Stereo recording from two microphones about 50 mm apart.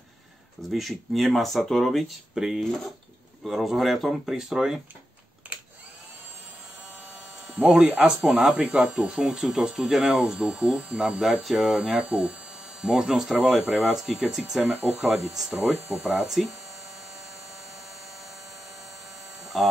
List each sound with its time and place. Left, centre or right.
0.7 s speech: centre
2.3 s speech: centre
5.4 s vacuum cleaner: right
7.4 s a sound: right
8.1 s speech: centre
11.0 s speech: centre
12.0 s speech: right; by 16.5 s centre
19.5 s speech: centre